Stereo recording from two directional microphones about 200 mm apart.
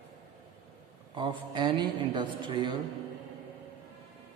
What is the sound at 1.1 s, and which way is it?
A woman's voice, 25° right (ahead or behind).